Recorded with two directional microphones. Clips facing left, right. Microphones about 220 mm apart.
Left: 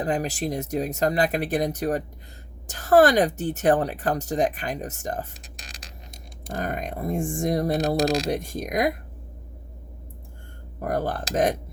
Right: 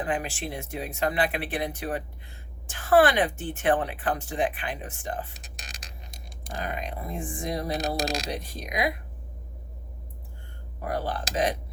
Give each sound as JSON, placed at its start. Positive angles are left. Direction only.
{"t": 0.0, "sound": "speech", "side_deg": 40}
{"t": 6.5, "sound": "speech", "side_deg": 45}
{"t": 10.8, "sound": "speech", "side_deg": 45}